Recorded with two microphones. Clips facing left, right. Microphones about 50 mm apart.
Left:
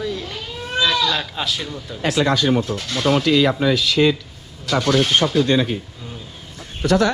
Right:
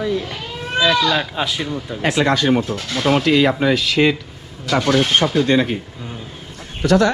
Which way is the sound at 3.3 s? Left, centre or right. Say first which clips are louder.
Right 2 dB; right.